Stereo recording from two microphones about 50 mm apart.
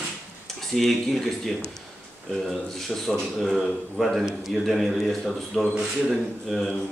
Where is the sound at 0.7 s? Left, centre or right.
Centre.